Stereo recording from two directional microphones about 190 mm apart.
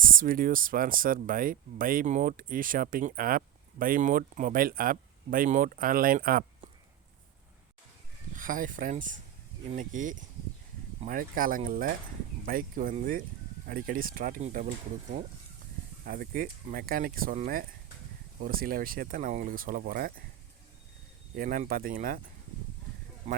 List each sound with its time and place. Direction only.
0.0 s speech: 45° right (ahead or behind)
8.4 s speech: 45° right (ahead or behind)
16.0 s speech: 50° right (ahead or behind)
21.3 s speech: 45° right (ahead or behind)